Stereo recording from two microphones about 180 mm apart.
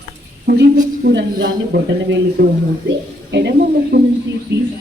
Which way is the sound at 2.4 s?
65° right (ahead or behind).